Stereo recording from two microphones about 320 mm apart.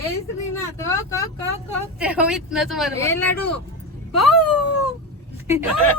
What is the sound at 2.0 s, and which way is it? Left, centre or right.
Speech, centre.